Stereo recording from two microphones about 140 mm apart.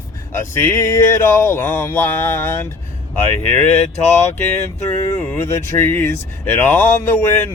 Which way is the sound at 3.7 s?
50° left (ahead or behind).